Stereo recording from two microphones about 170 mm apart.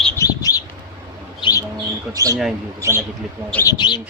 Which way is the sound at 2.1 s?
20° right (ahead or behind).